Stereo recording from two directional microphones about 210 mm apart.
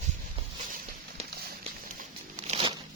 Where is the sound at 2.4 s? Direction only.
25° right (ahead or behind).